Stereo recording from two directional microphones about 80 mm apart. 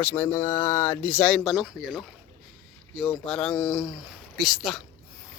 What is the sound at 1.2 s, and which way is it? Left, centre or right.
Speech, centre.